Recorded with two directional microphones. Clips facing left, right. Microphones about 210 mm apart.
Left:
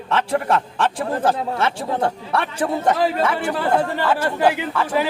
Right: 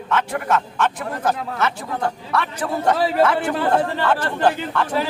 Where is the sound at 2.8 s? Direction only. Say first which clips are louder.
Right 3 dB; 10° left (ahead or behind).